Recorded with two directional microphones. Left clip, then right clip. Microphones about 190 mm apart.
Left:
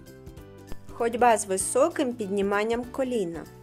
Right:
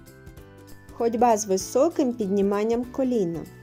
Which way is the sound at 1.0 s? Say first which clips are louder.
Right 1 dB; 15° right (ahead or behind).